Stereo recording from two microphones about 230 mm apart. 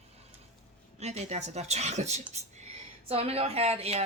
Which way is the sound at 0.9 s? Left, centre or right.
Right.